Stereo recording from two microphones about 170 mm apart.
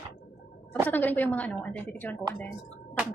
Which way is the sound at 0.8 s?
10° left (ahead or behind).